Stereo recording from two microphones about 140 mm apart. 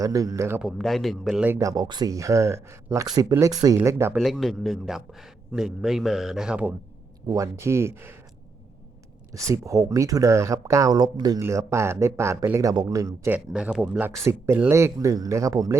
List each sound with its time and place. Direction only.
0.0 s speech: 25° right (ahead or behind)
0.6 s a man's voice: centre (ahead or behind)
1.5 s speech: 20° right (ahead or behind)
4.1 s a man's voice: centre (ahead or behind)
7.3 s speech: 20° right (ahead or behind)
9.3 s speech: 25° right (ahead or behind)
13.5 s speech: 5° right (ahead or behind); by 15.8 s 25° right (ahead or behind)